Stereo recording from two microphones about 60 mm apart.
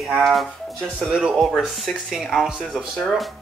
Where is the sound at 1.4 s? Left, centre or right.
Centre.